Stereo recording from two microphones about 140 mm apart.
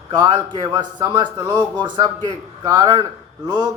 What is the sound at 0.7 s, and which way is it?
A man's voice, 30° right (ahead or behind).